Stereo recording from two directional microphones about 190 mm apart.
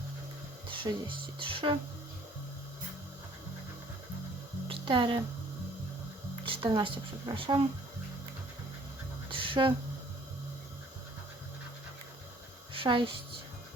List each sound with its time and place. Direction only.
0.7 s speech: 25° right (ahead or behind)
4.7 s music: 25° right (ahead or behind)
6.4 s speech: 25° right (ahead or behind)
9.3 s a sound: 25° right (ahead or behind)
12.7 s a woman's voice: 25° right (ahead or behind)